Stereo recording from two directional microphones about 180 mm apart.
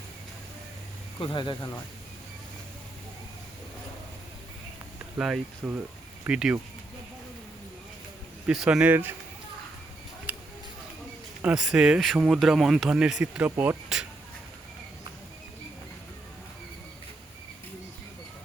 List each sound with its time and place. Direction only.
1.2 s speech: 25° left (ahead or behind)
5.1 s speech: 5° right (ahead or behind)
8.4 s speech: 5° right (ahead or behind)
10.3 s a sound: 5° right (ahead or behind)
11.4 s speech: 5° right (ahead or behind)